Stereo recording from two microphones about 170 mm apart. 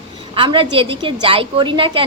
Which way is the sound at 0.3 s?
30° right (ahead or behind).